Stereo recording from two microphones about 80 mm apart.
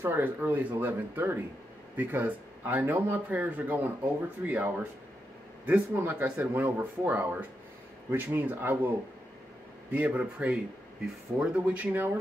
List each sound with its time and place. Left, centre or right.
0.0 s speech: right